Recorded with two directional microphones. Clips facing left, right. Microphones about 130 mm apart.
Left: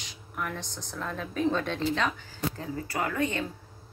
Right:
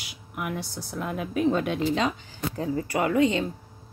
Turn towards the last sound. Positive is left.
turn(degrees=-20)  # may be behind; listen again after turning